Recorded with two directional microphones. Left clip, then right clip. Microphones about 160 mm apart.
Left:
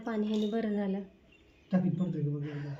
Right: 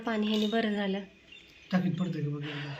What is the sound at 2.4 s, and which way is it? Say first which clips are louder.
Speech: right 3 dB; 15° right (ahead or behind).